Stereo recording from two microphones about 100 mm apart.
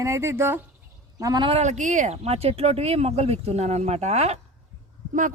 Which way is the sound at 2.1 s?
90° right.